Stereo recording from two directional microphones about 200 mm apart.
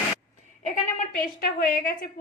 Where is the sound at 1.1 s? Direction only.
45° left (ahead or behind).